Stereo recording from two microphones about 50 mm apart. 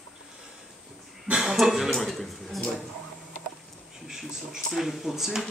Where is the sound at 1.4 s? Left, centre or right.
Centre.